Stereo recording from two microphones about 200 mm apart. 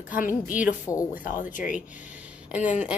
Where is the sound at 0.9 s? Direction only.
10° left (ahead or behind).